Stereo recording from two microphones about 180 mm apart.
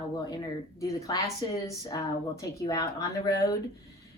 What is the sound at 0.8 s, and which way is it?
A woman's voice, 15° left (ahead or behind).